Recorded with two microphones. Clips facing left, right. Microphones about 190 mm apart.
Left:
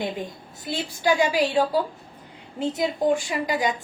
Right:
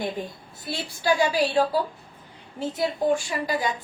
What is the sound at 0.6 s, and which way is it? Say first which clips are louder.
A woman's voice: left 3 dB; 20° left (ahead or behind).